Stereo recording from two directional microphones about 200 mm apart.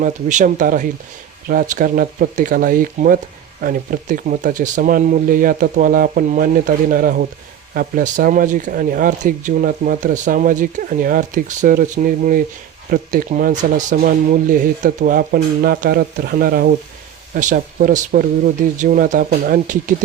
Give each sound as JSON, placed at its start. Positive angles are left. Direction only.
{"t": 0.0, "sound": "speech", "side_deg": -40}